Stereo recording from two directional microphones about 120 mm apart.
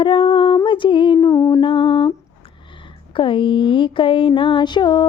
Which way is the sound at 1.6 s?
45° left (ahead or behind).